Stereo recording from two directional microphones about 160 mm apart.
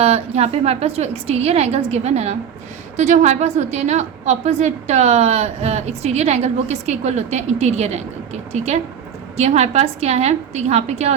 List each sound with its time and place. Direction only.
0.0 s a woman's voice: 40° right (ahead or behind)
9.4 s a woman's voice: 45° right (ahead or behind)